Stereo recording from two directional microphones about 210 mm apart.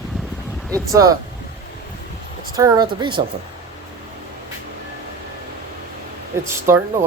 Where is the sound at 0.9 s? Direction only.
15° right (ahead or behind).